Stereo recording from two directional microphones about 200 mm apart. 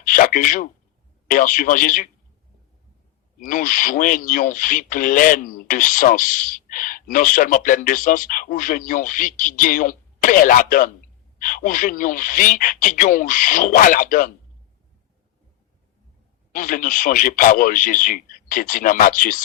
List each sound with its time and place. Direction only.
0.0 s a sound: 40° left (ahead or behind)
1.3 s speech: 45° left (ahead or behind)
3.4 s speech: 40° left (ahead or behind)
16.5 s speech: 45° left (ahead or behind)